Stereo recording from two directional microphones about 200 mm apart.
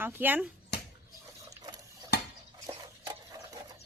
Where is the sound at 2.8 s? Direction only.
20° right (ahead or behind).